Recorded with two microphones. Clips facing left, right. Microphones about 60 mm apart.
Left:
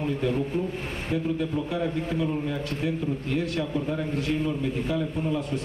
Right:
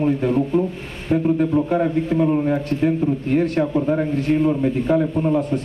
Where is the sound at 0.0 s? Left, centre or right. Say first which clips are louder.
Right 8 dB; right.